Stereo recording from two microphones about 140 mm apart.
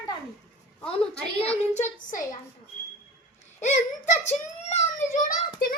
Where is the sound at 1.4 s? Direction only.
50° left (ahead or behind).